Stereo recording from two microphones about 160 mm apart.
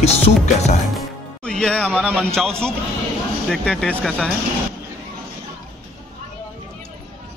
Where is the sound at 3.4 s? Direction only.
5° left (ahead or behind).